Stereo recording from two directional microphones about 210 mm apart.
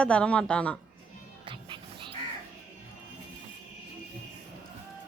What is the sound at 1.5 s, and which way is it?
Music, 25° right (ahead or behind).